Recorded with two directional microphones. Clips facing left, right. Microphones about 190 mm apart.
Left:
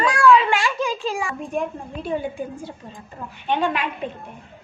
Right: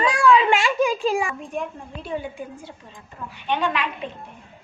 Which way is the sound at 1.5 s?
45° left (ahead or behind).